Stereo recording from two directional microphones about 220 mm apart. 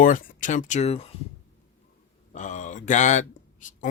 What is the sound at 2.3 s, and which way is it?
Speech, 35° left (ahead or behind).